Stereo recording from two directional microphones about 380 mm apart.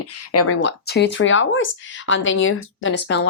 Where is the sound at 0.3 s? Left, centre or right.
Left.